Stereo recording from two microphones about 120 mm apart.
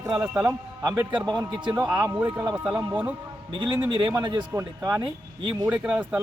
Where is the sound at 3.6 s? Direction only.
40° right (ahead or behind).